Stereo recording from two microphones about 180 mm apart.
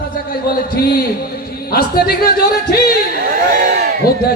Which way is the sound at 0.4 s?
55° left (ahead or behind).